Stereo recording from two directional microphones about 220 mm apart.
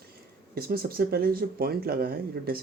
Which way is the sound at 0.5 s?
45° right (ahead or behind).